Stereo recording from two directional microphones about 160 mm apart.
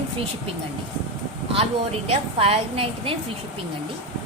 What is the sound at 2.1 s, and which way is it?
A woman's voice, 35° right (ahead or behind).